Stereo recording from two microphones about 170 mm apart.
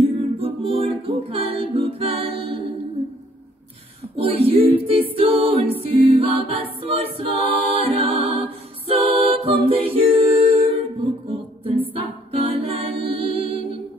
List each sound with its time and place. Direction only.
0.0 s music: 35° right (ahead or behind)
4.2 s music: 35° right (ahead or behind)
5.8 s a capella: 35° right (ahead or behind)
11.9 s a capella: 35° right (ahead or behind)